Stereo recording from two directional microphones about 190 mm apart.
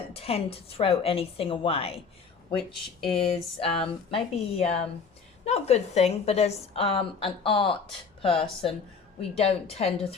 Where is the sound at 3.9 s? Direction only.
30° left (ahead or behind).